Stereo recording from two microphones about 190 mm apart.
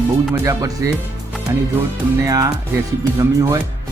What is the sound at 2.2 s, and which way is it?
Speech, 20° right (ahead or behind).